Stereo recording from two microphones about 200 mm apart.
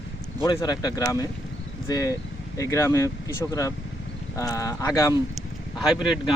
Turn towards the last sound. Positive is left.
turn(degrees=0)  # may be behind; listen again after turning